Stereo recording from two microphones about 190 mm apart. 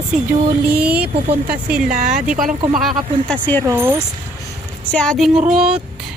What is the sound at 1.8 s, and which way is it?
Speech, 45° right (ahead or behind).